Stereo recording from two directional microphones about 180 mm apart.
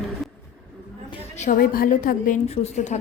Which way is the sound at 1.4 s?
50° left (ahead or behind).